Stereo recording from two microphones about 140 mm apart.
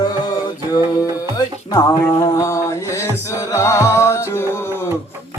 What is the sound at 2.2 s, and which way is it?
Music, 25° left (ahead or behind).